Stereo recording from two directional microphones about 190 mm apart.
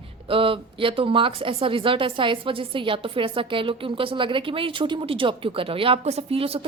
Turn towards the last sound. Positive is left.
turn(degrees=-30)  # may be behind; listen again after turning